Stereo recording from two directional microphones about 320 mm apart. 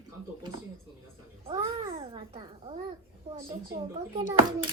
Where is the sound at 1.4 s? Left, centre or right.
Centre.